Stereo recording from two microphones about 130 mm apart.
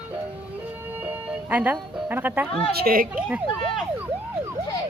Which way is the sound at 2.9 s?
90° right.